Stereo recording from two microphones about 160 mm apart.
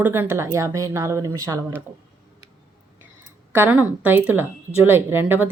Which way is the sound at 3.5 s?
10° right (ahead or behind).